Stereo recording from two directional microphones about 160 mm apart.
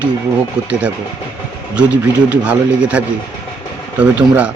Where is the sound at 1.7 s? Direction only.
10° right (ahead or behind).